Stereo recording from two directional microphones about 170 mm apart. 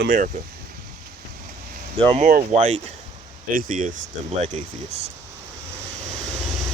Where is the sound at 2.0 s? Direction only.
30° right (ahead or behind).